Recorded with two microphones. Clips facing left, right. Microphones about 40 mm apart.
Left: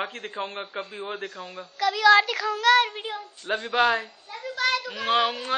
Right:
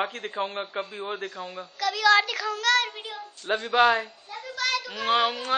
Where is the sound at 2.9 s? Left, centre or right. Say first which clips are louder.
Left 4 dB; left.